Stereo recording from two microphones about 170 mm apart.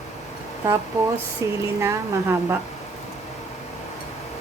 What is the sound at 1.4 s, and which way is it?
A woman's voice, 20° right (ahead or behind).